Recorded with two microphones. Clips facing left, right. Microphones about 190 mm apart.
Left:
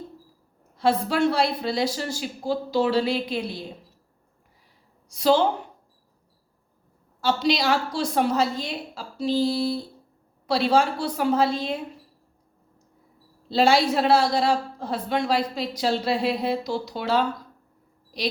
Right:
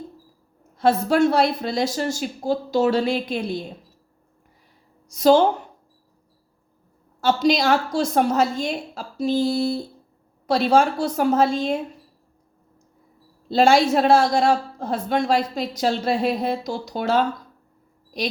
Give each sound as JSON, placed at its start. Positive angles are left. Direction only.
{"t": 0.8, "sound": "a woman's voice", "side_deg": -45}
{"t": 5.0, "sound": "a woman's voice", "side_deg": -45}
{"t": 7.2, "sound": "a woman's voice", "side_deg": -45}
{"t": 13.5, "sound": "a woman's voice", "side_deg": -45}